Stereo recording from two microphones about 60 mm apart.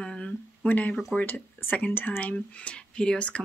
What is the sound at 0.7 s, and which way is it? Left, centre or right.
Speech, left.